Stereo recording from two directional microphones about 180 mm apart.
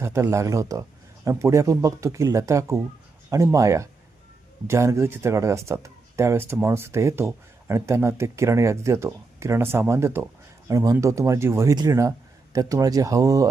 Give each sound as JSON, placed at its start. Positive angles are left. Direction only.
{"t": 0.0, "sound": "speech", "side_deg": -15}